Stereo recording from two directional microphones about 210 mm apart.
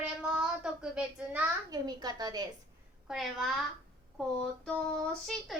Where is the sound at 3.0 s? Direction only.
Centre (ahead or behind).